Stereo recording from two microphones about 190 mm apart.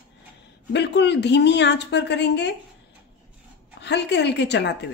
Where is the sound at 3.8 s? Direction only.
65° left (ahead or behind).